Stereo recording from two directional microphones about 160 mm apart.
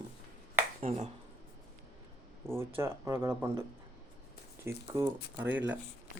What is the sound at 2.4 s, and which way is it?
Speech, 15° right (ahead or behind).